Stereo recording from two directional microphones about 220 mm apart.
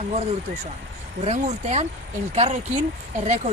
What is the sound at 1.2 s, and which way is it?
Speech, 30° right (ahead or behind).